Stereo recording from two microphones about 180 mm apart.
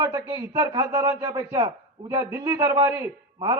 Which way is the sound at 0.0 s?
20° right (ahead or behind).